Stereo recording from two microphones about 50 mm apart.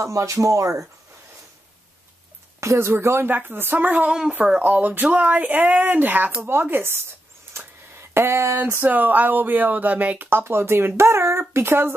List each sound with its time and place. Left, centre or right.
0.0 s speech: right
2.6 s speech: right
3.3 s speech: right
3.9 s speech: right
7.5 s a sound: right
8.1 s speech: right
8.8 s speech: right
10.3 s speech: right